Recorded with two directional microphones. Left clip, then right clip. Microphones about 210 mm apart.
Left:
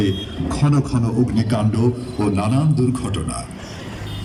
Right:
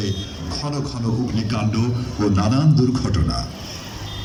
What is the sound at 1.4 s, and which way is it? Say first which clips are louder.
Speech: left 3 dB; 40° left (ahead or behind).